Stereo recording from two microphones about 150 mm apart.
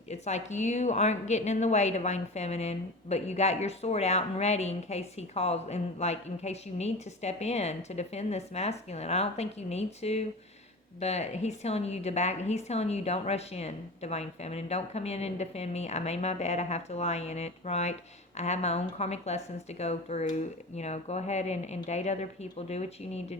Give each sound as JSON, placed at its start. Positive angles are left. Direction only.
{"t": 0.1, "sound": "a woman's voice", "side_deg": 50}